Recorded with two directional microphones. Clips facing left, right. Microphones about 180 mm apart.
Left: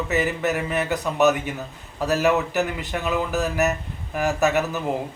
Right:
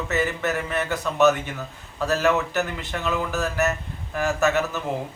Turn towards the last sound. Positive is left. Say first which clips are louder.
# left 1 dB
turn(degrees=15)  # may be behind; listen again after turning